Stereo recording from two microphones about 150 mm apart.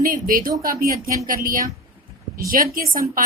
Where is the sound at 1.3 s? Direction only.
65° right (ahead or behind).